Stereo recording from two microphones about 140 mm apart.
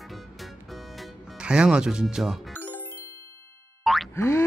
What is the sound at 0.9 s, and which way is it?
Music, 5° right (ahead or behind).